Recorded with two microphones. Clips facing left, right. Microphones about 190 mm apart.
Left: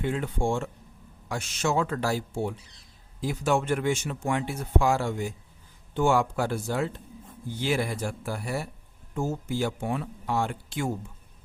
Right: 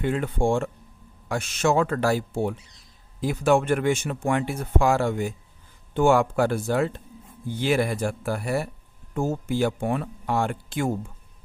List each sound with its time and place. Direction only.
0.0 s speech: 60° right (ahead or behind)